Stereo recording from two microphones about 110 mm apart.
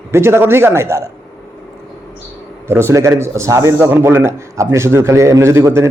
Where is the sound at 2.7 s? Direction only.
25° right (ahead or behind).